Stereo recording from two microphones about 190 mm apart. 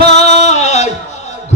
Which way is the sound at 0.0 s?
35° left (ahead or behind).